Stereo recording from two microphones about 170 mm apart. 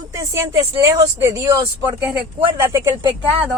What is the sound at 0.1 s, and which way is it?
Speech, 20° right (ahead or behind).